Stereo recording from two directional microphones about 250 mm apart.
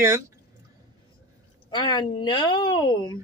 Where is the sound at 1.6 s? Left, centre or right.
Centre.